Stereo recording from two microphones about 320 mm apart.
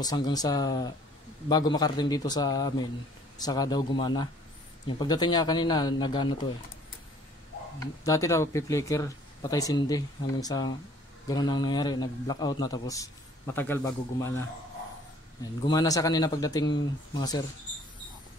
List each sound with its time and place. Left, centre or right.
0.0 s a man's voice: centre
7.8 s a man's voice: centre
15.6 s a man's voice: centre